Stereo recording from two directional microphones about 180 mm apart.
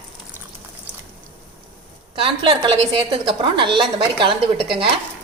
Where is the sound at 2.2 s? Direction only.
30° right (ahead or behind).